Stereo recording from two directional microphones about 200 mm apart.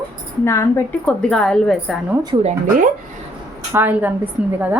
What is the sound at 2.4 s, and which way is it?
Speech, 35° right (ahead or behind).